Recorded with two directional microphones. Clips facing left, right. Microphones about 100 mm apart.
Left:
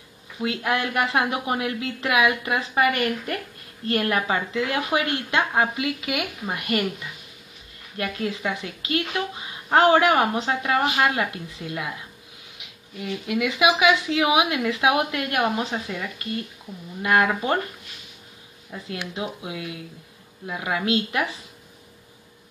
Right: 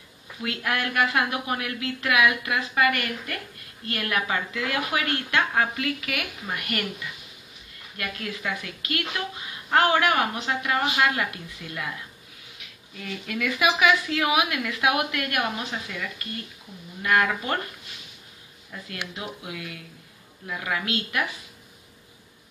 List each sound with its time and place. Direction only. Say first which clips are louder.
0.4 s a woman's voice: left 4 dB; 25° left (ahead or behind)
8.0 s a woman's voice: left 5 dB; 25° left (ahead or behind)
18.7 s a woman's voice: left 4 dB; 20° left (ahead or behind)